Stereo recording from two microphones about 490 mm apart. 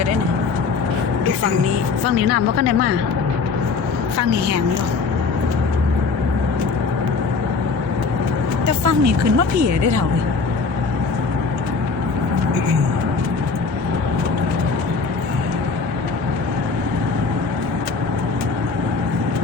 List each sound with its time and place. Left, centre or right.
2.1 s a woman's voice: right
8.6 s speech: right